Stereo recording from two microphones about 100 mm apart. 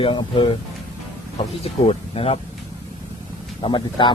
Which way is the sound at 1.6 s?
80° left.